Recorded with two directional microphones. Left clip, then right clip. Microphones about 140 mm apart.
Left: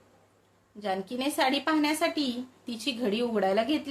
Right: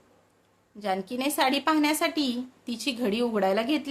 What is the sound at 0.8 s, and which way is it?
A woman's voice, 30° right (ahead or behind).